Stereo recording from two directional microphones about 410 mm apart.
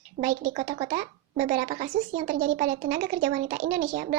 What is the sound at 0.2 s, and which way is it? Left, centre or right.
A woman's voice, centre.